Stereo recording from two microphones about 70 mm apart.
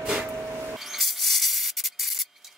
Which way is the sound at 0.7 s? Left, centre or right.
Centre.